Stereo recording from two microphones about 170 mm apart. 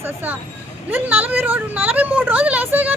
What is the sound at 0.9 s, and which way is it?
Speech, 10° right (ahead or behind).